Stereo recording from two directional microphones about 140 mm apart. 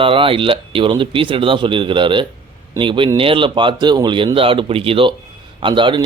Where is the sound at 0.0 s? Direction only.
40° right (ahead or behind).